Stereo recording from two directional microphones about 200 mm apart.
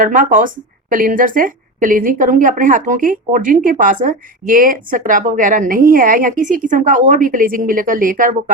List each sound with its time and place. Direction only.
0.0 s a woman's voice: 40° right (ahead or behind)